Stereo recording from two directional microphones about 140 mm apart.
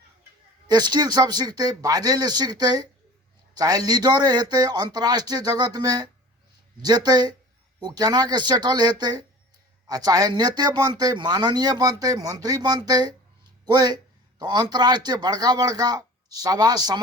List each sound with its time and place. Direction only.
0.7 s a man's voice: 30° right (ahead or behind)